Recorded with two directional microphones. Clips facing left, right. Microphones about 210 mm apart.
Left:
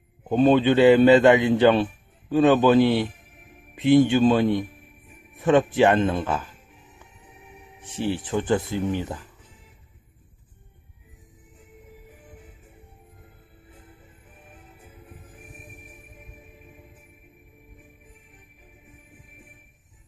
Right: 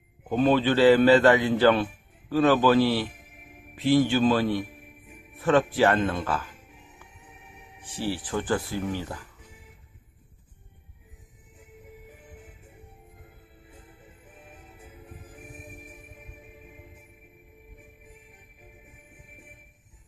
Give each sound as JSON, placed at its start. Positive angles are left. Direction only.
{"t": 0.3, "sound": "a man's voice", "side_deg": 20}
{"t": 7.8, "sound": "a man's voice", "side_deg": 20}